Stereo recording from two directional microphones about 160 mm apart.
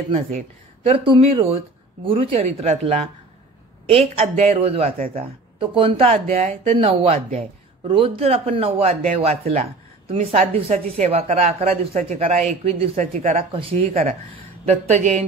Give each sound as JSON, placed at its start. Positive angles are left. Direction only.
{"t": 0.8, "sound": "speech", "side_deg": -35}